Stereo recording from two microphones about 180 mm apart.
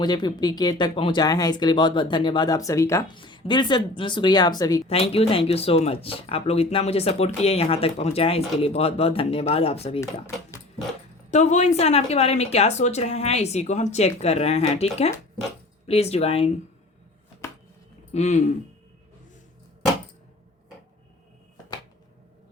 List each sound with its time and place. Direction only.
0.0 s speech: 25° left (ahead or behind)
3.2 s speech: 25° left (ahead or behind)
4.9 s speech: 35° left (ahead or behind)
11.3 s speech: 40° left (ahead or behind)
15.9 s speech: 35° left (ahead or behind)
18.1 s speech: 40° left (ahead or behind)